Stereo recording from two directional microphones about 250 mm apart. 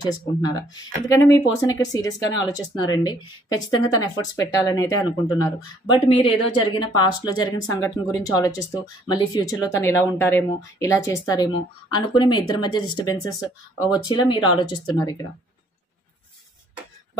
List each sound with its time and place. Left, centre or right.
0.0 s speech: centre